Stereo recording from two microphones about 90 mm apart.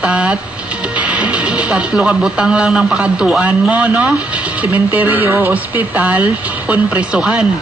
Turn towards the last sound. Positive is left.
turn(degrees=-10)  # may be behind; listen again after turning